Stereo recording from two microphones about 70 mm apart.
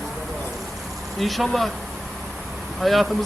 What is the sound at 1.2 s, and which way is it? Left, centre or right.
Speech, centre.